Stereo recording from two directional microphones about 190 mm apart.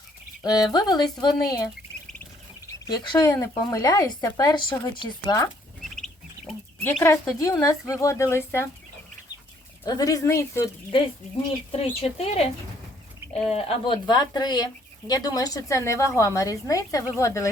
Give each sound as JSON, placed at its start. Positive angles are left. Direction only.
{"t": 0.4, "sound": "speech", "side_deg": 20}
{"t": 2.8, "sound": "speech", "side_deg": 20}
{"t": 7.0, "sound": "a woman's voice", "side_deg": 15}
{"t": 9.8, "sound": "a woman's voice", "side_deg": 20}
{"t": 11.7, "sound": "speech", "side_deg": 30}
{"t": 13.5, "sound": "a woman's voice", "side_deg": 30}